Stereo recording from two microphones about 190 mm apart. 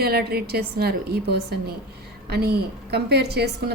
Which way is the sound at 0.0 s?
55° right (ahead or behind).